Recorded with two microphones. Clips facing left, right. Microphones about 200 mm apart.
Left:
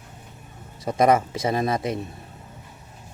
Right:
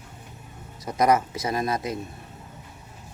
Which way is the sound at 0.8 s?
25° left (ahead or behind).